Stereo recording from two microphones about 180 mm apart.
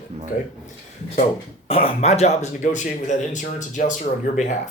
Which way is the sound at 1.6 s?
35° left (ahead or behind).